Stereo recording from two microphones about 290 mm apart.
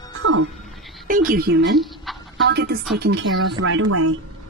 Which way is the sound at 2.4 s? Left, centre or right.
Right.